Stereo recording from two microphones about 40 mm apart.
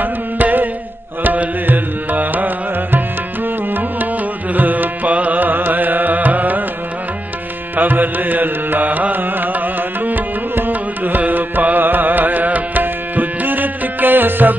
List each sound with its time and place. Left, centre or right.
0.0 s music: right
4.6 s music: right
7.7 s carnatic music: right
10.7 s carnatic music: right